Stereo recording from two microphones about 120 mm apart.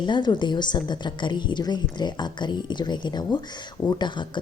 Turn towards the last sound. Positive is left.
turn(degrees=40)  # may be behind; listen again after turning